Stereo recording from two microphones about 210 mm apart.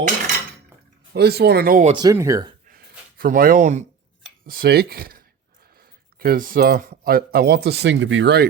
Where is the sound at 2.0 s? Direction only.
15° right (ahead or behind).